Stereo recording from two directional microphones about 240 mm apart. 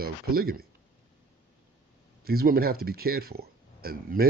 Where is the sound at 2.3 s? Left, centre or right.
Right.